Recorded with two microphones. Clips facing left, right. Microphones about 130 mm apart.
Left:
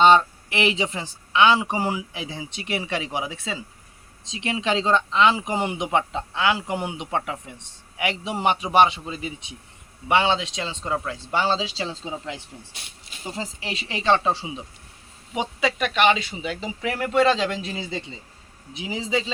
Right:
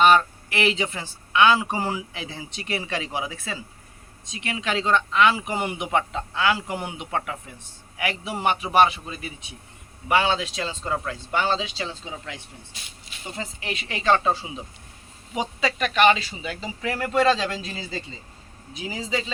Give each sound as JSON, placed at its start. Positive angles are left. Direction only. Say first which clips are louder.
{"t": 0.0, "sound": "a woman's voice", "louder": "left 2 dB", "side_deg": 20}
{"t": 11.3, "sound": "a woman's voice", "louder": "left 1 dB", "side_deg": 30}